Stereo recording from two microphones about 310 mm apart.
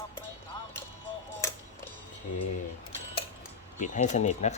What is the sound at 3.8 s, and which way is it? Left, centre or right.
Speech, left.